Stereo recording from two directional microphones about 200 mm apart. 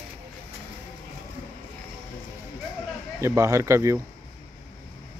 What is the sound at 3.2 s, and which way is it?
Speech, 15° right (ahead or behind).